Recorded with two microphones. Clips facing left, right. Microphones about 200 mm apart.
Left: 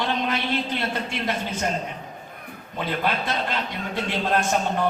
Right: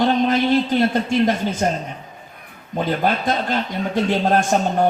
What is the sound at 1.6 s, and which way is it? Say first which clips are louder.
Speech: right 5 dB; 40° right (ahead or behind).